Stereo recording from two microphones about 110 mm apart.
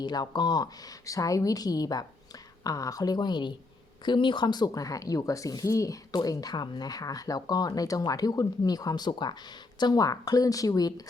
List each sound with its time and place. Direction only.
0.0 s speech: 40° left (ahead or behind)